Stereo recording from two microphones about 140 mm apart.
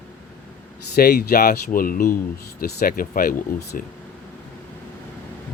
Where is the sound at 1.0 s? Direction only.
90° left.